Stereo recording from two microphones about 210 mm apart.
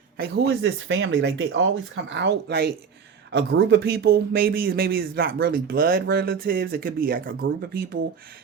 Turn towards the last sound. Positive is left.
turn(degrees=-45)  # may be behind; listen again after turning